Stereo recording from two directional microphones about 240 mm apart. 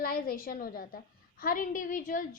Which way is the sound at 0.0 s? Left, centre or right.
Left.